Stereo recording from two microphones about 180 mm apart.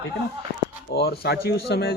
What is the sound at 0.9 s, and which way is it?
Speech, 60° left (ahead or behind).